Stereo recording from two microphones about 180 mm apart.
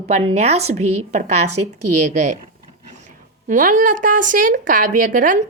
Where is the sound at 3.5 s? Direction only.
45° right (ahead or behind).